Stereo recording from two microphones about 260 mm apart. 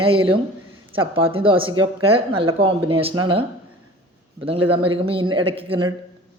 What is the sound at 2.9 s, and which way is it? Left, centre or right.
A man's voice, right.